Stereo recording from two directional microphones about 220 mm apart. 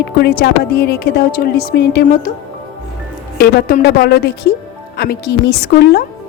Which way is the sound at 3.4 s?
45° left (ahead or behind).